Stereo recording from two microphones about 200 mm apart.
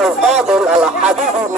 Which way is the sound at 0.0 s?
Centre (ahead or behind).